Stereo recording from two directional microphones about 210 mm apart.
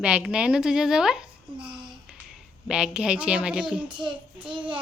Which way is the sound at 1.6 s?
20° right (ahead or behind).